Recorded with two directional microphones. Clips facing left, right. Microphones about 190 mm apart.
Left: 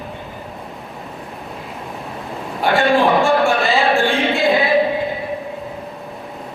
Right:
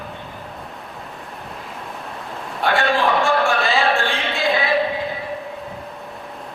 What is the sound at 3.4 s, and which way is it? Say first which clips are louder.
Music: left 3 dB; centre (ahead or behind).